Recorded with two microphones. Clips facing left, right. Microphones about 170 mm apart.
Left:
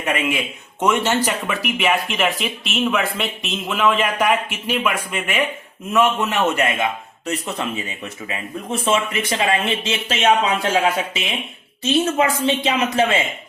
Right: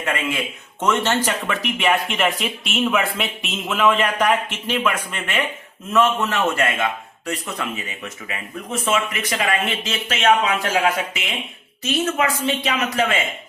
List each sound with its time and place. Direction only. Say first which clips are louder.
0.0 s a man's voice: left 2 dB; 15° left (ahead or behind)